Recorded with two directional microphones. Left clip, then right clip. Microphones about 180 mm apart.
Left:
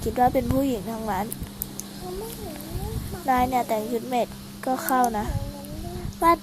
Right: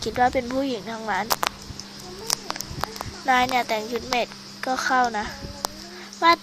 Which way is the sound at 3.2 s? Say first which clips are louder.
Right 2 dB; centre (ahead or behind).